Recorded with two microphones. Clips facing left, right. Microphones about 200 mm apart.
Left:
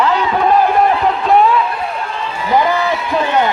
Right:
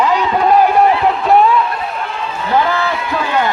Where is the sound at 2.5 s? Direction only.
15° left (ahead or behind).